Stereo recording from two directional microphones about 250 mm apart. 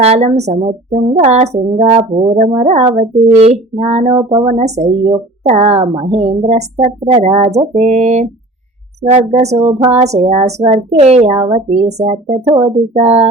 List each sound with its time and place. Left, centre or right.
0.0 s a woman's voice: right